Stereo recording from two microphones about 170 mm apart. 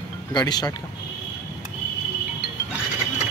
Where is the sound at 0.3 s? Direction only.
25° left (ahead or behind).